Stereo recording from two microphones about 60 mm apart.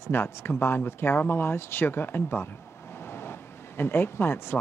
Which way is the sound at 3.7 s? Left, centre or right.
Left.